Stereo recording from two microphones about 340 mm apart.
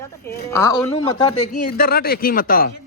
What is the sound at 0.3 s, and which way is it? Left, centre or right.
A man's voice, centre.